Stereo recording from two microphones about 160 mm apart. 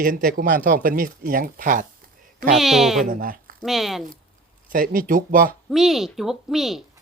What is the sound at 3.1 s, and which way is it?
Speech, 60° right (ahead or behind).